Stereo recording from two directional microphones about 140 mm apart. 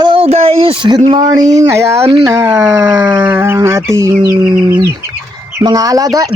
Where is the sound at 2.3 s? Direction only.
20° right (ahead or behind).